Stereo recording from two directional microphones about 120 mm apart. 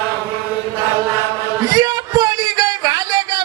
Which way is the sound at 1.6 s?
30° right (ahead or behind).